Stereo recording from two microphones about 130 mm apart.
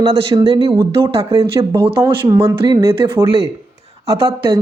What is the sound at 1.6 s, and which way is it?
Speech, 30° right (ahead or behind).